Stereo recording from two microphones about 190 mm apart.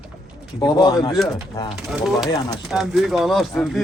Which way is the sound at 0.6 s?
20° left (ahead or behind).